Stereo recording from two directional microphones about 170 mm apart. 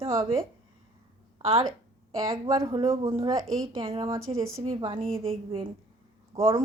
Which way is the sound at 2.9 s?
15° right (ahead or behind).